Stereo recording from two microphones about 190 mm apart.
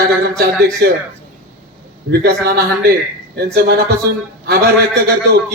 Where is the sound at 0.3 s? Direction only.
55° right (ahead or behind).